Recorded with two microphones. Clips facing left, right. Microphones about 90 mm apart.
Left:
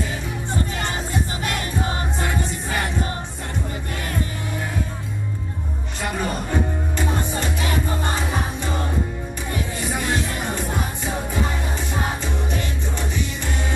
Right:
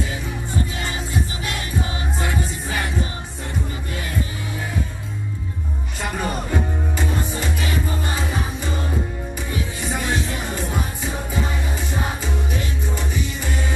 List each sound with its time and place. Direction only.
0.5 s music: 45° left (ahead or behind)
6.0 s music: centre (ahead or behind)
9.8 s music: centre (ahead or behind)
12.4 s music: 5° right (ahead or behind)